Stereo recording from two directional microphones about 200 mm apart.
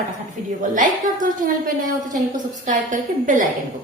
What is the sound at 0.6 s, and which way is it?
A woman's voice, 40° right (ahead or behind).